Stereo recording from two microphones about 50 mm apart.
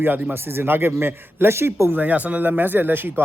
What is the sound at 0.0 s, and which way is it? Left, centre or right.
Speech, right.